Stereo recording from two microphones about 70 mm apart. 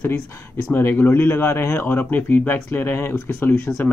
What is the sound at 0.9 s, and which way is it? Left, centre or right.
Speech, left.